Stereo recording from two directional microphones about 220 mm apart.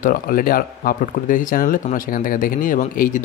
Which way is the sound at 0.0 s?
40° left (ahead or behind).